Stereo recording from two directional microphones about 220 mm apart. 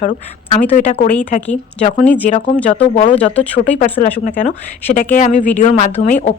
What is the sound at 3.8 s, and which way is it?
Speech, 35° left (ahead or behind).